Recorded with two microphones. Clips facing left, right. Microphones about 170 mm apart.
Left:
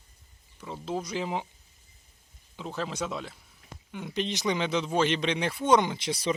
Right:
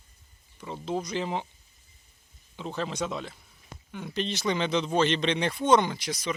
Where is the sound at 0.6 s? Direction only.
Centre (ahead or behind).